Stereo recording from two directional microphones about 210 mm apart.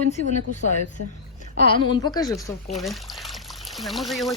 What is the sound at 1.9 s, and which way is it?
Speech, 20° left (ahead or behind).